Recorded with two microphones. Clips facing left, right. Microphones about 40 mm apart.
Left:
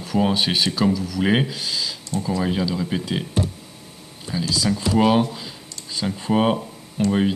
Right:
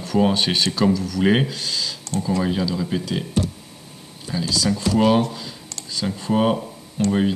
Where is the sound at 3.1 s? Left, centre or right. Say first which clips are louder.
Right 1 dB; left.